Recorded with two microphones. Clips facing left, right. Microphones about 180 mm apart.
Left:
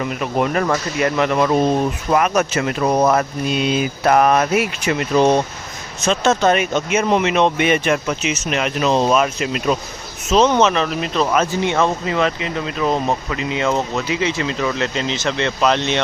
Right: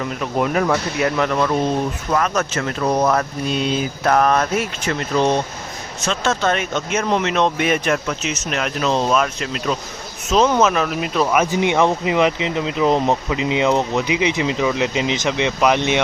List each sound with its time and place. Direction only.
0.0 s speech: 5° left (ahead or behind)
10.3 s speech: centre (ahead or behind)